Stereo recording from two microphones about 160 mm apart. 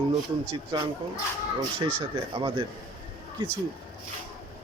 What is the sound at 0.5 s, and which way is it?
Speech, 30° right (ahead or behind).